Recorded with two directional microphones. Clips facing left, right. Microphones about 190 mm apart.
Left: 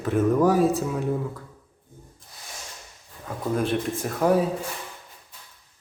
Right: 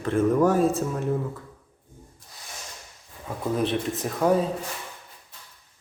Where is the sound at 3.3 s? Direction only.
Centre (ahead or behind).